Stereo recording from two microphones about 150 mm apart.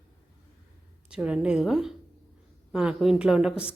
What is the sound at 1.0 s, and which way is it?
A woman's voice, 5° right (ahead or behind).